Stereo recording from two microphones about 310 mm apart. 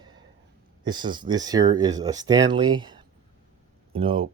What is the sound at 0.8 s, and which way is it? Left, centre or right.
Speech, centre.